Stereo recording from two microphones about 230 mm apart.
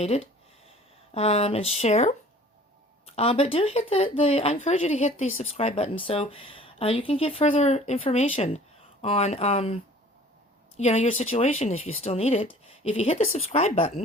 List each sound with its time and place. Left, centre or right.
0.0 s speech: left